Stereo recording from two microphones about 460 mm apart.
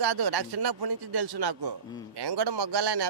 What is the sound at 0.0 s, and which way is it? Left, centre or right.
A man's voice, right.